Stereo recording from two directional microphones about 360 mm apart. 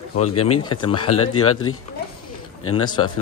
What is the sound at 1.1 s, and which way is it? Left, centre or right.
A man's voice, left.